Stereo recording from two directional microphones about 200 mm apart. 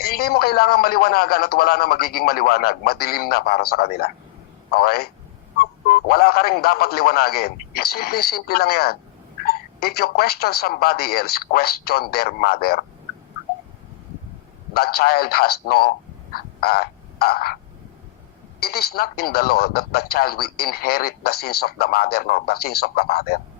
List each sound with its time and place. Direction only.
0.0 s speech: 50° left (ahead or behind)
14.7 s a man's voice: 50° left (ahead or behind)
18.6 s speech: 50° left (ahead or behind)